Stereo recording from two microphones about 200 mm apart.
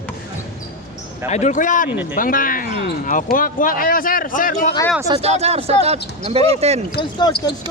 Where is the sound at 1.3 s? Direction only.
35° left (ahead or behind).